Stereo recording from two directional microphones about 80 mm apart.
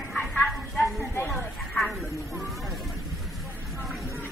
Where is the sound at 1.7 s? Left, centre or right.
Centre.